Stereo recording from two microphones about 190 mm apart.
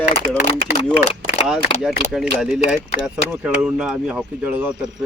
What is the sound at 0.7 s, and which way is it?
Speech, 35° left (ahead or behind).